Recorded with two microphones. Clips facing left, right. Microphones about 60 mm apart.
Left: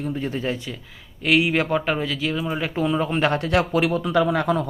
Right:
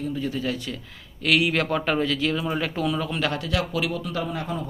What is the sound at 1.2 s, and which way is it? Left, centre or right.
Speech, centre.